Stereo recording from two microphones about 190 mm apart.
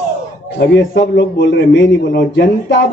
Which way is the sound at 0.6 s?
70° left (ahead or behind).